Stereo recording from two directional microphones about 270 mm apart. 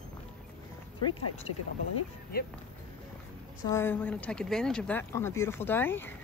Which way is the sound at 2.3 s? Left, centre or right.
Left.